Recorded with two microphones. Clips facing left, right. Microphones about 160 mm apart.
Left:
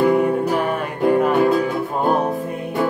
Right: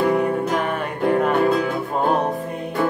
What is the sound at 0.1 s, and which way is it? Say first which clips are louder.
Music: left 3 dB; centre (ahead or behind).